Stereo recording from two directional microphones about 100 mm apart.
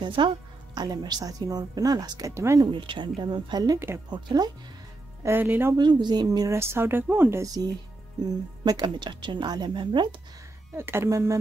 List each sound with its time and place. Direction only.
0.0 s a woman's voice: 55° right (ahead or behind)
0.7 s a woman's voice: 45° right (ahead or behind)
2.6 s speech: 50° right (ahead or behind)
5.2 s speech: 20° right (ahead or behind)
5.8 s speech: 45° right (ahead or behind); by 7.5 s 25° right (ahead or behind)
8.2 s speech: 40° right (ahead or behind)
10.8 s speech: 25° right (ahead or behind)